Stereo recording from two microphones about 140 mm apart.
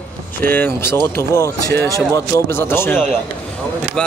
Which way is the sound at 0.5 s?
15° left (ahead or behind).